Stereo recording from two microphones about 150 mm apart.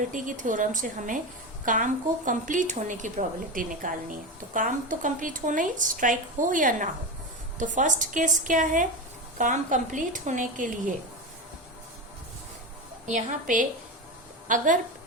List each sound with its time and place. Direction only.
0.1 s speech: 60° right (ahead or behind)
13.1 s a woman's voice: 60° right (ahead or behind)